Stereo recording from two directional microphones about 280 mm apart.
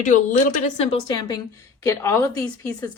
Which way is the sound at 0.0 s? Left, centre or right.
Left.